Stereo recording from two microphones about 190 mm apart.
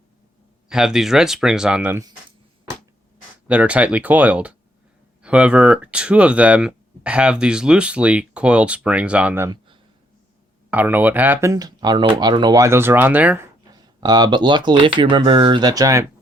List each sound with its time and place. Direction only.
0.7 s speech: 5° right (ahead or behind)
3.4 s speech: 5° right (ahead or behind)
10.7 s speech: 10° right (ahead or behind)